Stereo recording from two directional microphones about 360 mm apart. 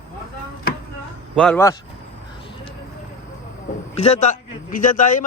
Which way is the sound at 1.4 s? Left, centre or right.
Centre.